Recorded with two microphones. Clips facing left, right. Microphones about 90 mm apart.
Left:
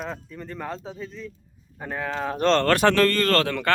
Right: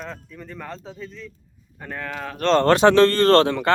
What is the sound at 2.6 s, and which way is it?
A man's voice, 20° right (ahead or behind).